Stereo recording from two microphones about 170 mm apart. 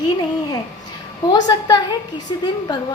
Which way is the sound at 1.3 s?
25° left (ahead or behind).